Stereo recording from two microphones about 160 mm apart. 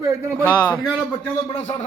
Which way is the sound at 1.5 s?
35° left (ahead or behind).